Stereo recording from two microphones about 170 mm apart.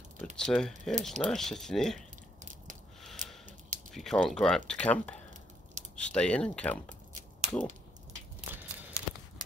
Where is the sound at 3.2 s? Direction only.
50° right (ahead or behind).